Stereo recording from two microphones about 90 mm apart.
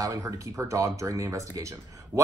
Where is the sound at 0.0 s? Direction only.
40° right (ahead or behind).